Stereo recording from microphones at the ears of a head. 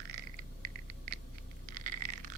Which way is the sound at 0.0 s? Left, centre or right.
Right.